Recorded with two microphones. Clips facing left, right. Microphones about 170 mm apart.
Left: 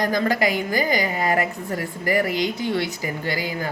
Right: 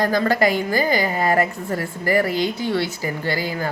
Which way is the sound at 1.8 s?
20° left (ahead or behind).